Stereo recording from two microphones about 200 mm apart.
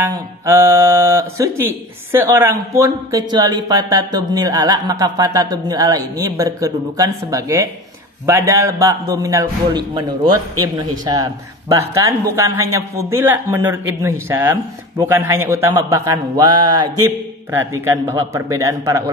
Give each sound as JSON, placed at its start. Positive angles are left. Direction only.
{"t": 0.0, "sound": "speech", "side_deg": -10}